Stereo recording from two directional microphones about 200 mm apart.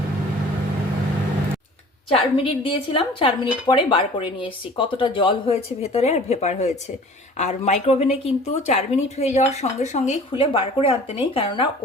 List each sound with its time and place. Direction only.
2.0 s speech: 25° left (ahead or behind)